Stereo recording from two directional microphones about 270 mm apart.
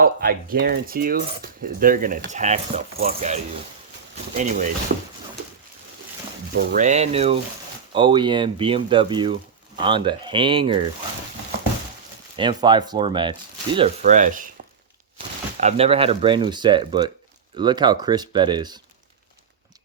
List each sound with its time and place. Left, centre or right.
0.0 s coin: right
4.4 s speech: right
6.5 s speech: right; by 10.8 s centre
12.4 s speech: centre
15.5 s speech: right